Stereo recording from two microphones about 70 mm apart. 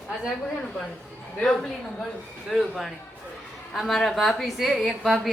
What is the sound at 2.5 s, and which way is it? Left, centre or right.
A woman's voice, centre.